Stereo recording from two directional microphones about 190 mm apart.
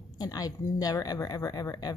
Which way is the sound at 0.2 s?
20° left (ahead or behind).